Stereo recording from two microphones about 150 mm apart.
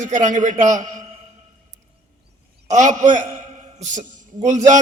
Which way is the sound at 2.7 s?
55° right (ahead or behind).